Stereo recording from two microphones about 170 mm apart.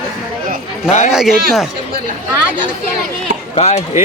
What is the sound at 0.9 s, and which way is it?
Speech, 45° left (ahead or behind).